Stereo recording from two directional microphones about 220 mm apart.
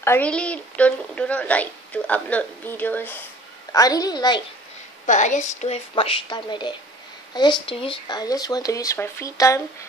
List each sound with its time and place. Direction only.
0.0 s speech: 10° left (ahead or behind)
5.0 s a woman's voice: 35° left (ahead or behind); by 9.6 s 15° left (ahead or behind)